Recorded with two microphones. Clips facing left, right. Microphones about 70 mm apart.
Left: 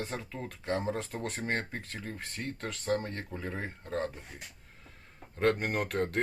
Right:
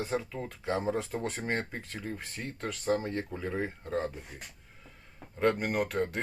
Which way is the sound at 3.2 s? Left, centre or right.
Centre.